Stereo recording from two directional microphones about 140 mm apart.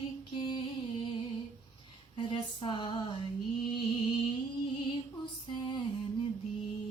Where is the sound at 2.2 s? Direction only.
35° left (ahead or behind).